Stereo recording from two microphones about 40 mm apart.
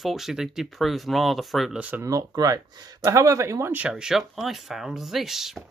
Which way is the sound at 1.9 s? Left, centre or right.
Right.